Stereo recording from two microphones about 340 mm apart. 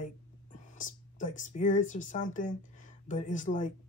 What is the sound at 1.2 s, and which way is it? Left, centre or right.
Speech, left.